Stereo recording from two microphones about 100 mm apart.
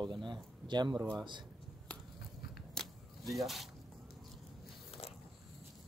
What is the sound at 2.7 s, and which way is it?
Vehicle, centre (ahead or behind).